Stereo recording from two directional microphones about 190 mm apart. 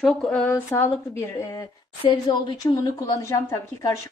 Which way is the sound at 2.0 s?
25° left (ahead or behind).